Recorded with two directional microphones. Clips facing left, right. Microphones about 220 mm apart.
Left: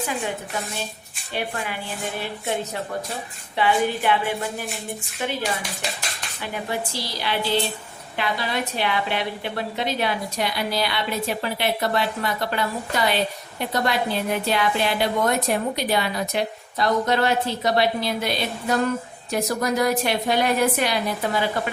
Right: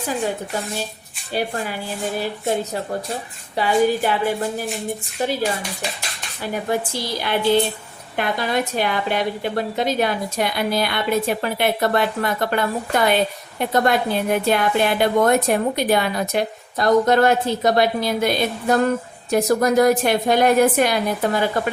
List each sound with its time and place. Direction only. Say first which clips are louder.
1.3 s a woman's voice: right 4 dB; 40° right (ahead or behind)
3.5 s a woman's voice: right 4 dB; 40° right (ahead or behind)
6.4 s a woman's voice: right 6 dB; 40° right (ahead or behind)